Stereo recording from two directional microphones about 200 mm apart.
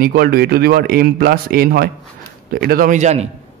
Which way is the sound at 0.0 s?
50° right (ahead or behind).